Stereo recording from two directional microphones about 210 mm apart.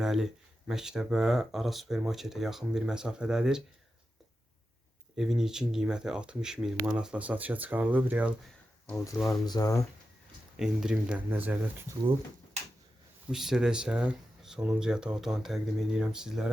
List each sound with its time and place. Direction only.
0.0 s speech: centre (ahead or behind)
5.1 s speech: centre (ahead or behind)
9.5 s speech: 15° left (ahead or behind)
10.6 s speech: 5° right (ahead or behind)
13.3 s speech: centre (ahead or behind)